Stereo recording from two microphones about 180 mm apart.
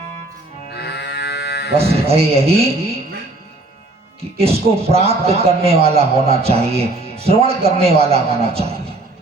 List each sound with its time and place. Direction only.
0.7 s livestock: 65° left (ahead or behind)
1.8 s a man's voice: 35° right (ahead or behind)
4.2 s a man's voice: 35° right (ahead or behind)